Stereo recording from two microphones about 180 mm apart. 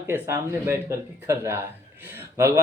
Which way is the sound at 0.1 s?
15° right (ahead or behind).